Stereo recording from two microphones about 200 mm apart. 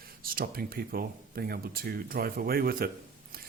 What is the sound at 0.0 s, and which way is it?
Speech, 45° right (ahead or behind).